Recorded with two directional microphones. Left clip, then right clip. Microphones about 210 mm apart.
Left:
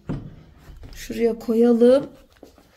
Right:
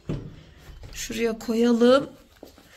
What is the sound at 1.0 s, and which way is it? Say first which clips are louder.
Speech: left 5 dB; 10° left (ahead or behind).